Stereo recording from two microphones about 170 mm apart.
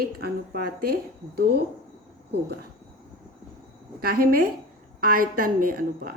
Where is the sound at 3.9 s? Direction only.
60° right (ahead or behind).